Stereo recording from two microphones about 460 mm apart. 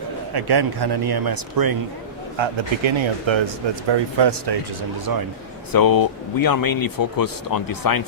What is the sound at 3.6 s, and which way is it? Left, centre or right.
Speech, right.